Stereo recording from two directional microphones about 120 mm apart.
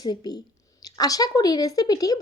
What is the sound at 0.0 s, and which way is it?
A woman's voice, 35° left (ahead or behind).